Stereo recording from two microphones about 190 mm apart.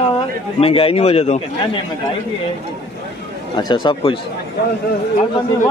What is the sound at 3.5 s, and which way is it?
Speech, 25° left (ahead or behind).